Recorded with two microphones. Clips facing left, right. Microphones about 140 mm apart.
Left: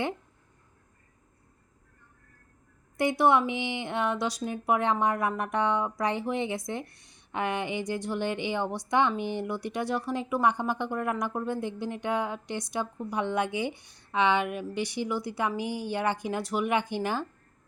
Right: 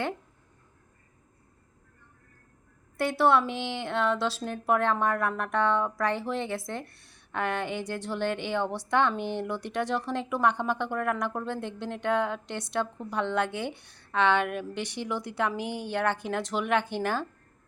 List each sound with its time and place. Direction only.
3.0 s a woman's voice: 15° left (ahead or behind)